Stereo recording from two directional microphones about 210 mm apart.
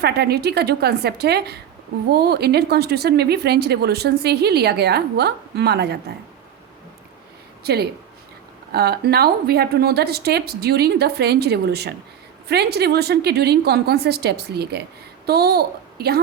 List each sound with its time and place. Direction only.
0.0 s speech: 50° right (ahead or behind)
7.6 s a woman's voice: 50° right (ahead or behind)